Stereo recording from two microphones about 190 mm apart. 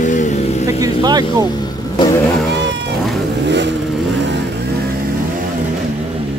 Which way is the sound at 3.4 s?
65° right (ahead or behind).